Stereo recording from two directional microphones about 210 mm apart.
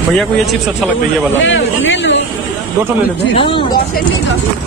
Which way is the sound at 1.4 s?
65° left (ahead or behind).